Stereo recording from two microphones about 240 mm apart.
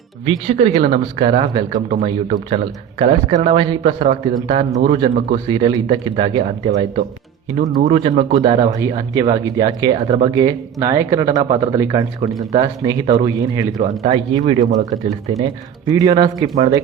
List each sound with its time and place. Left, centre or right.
0.3 s speech: right
15.9 s speech: centre